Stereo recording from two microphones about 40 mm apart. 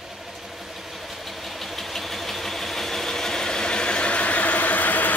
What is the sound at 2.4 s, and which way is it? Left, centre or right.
Vehicle, centre.